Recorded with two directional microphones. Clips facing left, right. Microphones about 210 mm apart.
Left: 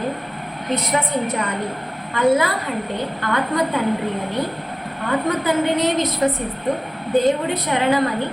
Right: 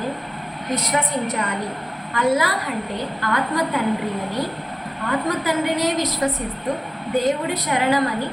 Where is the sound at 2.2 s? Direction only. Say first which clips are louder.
Left 3 dB; 25° left (ahead or behind).